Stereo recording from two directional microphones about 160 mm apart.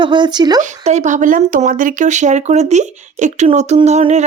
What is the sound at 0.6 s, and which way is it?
Speech, 50° right (ahead or behind).